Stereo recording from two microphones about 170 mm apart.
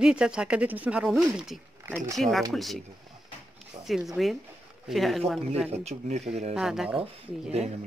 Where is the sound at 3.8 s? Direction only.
Centre (ahead or behind).